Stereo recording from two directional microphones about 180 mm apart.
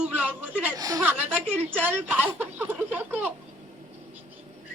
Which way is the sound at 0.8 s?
20° right (ahead or behind).